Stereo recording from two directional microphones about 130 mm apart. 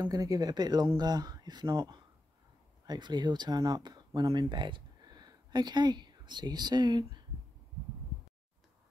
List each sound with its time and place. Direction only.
0.0 s speech: 30° right (ahead or behind)